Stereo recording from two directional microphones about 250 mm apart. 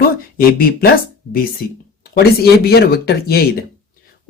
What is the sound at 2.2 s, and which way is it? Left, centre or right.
Speech, left.